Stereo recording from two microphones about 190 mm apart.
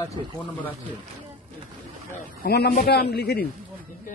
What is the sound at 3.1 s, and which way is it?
Speech, 55° left (ahead or behind).